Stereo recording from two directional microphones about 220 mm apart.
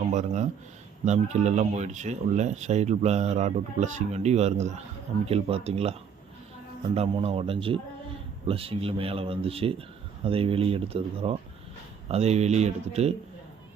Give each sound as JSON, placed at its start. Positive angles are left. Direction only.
{"t": 0.1, "sound": "speech", "side_deg": -30}